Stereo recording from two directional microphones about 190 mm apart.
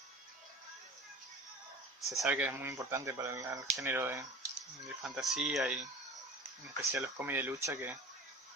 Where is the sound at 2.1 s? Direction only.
5° right (ahead or behind).